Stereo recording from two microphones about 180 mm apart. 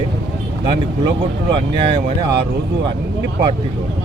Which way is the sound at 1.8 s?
30° right (ahead or behind).